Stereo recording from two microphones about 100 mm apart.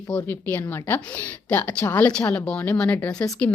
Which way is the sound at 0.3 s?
20° left (ahead or behind).